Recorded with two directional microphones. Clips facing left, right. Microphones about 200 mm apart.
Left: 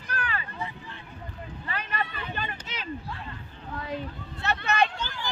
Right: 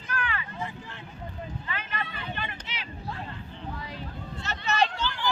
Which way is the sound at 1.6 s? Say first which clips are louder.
Left 6 dB; 40° left (ahead or behind).